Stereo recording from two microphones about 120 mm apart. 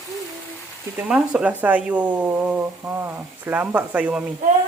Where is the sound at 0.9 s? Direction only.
15° right (ahead or behind).